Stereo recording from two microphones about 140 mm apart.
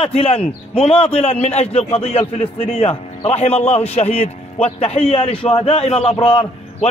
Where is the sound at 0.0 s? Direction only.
45° left (ahead or behind).